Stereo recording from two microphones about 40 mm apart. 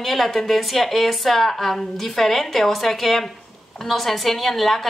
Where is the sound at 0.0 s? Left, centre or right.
Centre.